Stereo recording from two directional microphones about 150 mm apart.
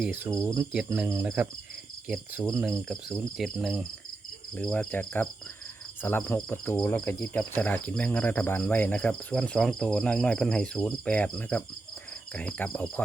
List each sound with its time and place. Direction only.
0.0 s speech: 10° right (ahead or behind)
0.4 s speech: 20° right (ahead or behind); by 3.8 s centre (ahead or behind)
4.5 s cricket: 10° left (ahead or behind)